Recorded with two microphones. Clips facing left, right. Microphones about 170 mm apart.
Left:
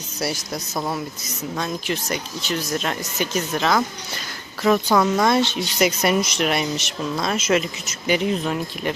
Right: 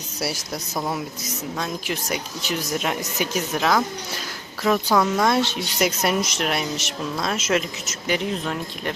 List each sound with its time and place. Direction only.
0.2 s speech: 5° right (ahead or behind)